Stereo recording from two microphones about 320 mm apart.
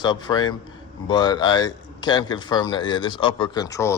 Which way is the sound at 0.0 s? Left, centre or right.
Centre.